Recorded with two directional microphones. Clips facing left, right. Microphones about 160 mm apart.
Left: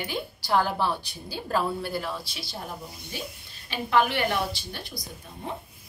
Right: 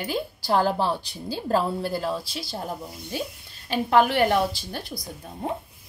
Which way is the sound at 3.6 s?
40° right (ahead or behind).